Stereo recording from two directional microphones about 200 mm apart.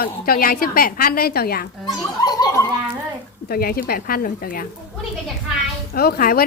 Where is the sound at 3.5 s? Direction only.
50° left (ahead or behind).